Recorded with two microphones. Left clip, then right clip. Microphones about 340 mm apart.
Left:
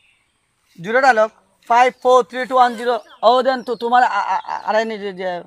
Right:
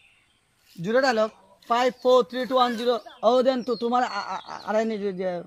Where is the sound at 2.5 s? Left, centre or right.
Left.